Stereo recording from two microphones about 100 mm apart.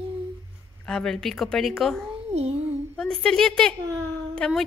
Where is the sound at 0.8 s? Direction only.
5° left (ahead or behind).